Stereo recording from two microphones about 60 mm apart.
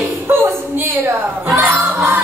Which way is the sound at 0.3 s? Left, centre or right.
Right.